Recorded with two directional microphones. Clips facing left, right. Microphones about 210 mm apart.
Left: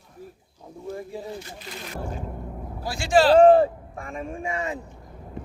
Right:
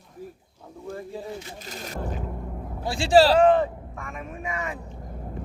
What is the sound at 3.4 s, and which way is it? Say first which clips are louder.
Speech: left 4 dB; 35° left (ahead or behind).